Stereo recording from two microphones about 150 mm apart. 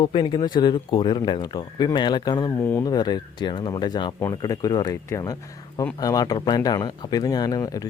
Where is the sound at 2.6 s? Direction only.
15° left (ahead or behind).